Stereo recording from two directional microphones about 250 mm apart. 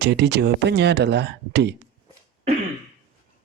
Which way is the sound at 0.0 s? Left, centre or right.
Right.